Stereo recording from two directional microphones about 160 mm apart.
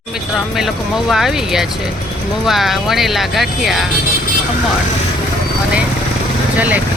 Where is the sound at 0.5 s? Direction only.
Centre (ahead or behind).